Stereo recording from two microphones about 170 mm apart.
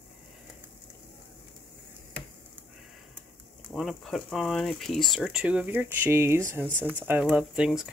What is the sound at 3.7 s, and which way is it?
Speech, centre (ahead or behind).